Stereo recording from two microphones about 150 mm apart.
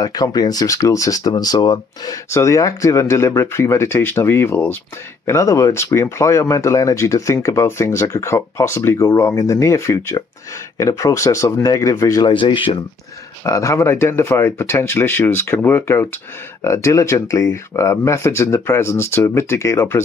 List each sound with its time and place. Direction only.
0.0 s speech: 25° left (ahead or behind)
12.3 s speech: 35° left (ahead or behind)
13.4 s speech: 20° left (ahead or behind)